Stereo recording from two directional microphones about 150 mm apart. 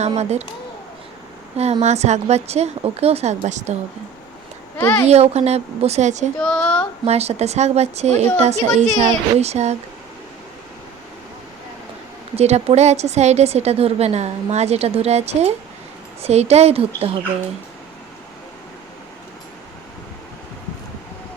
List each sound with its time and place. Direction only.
0.0 s a woman's voice: 45° right (ahead or behind)
1.8 s a woman's voice: 50° right (ahead or behind)
4.8 s speech: 15° left (ahead or behind)
5.0 s a woman's voice: 45° right (ahead or behind)
6.4 s child singing: 5° left (ahead or behind)
7.0 s a woman's voice: 45° right (ahead or behind)
12.4 s a woman's voice: 45° right (ahead or behind)